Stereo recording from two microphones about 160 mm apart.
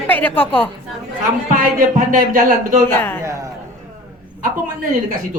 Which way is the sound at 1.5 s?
60° right (ahead or behind).